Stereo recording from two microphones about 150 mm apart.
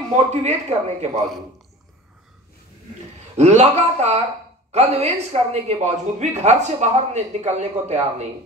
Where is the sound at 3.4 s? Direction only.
50° right (ahead or behind).